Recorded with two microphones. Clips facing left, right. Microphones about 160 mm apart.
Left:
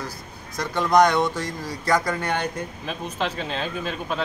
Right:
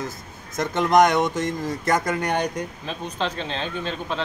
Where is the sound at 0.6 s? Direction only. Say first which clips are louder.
Right 1 dB; 20° right (ahead or behind).